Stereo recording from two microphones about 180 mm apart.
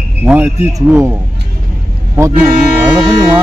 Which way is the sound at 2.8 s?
20° right (ahead or behind).